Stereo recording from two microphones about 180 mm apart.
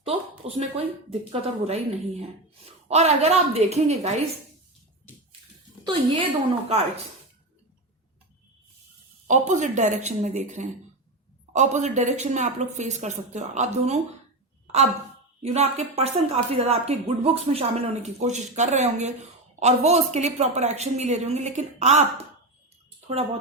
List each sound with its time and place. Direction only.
0.0 s a sound: 35° right (ahead or behind)
1.3 s speech: 35° right (ahead or behind)
5.8 s a woman's voice: 30° right (ahead or behind)
9.2 s a woman's voice: 40° right (ahead or behind)
15.4 s speech: 40° right (ahead or behind)
23.0 s a sound: 35° right (ahead or behind)